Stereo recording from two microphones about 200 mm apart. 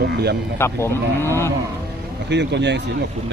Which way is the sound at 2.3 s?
60° right (ahead or behind).